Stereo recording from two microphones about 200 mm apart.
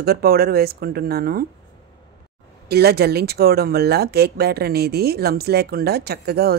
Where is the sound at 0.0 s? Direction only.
50° right (ahead or behind).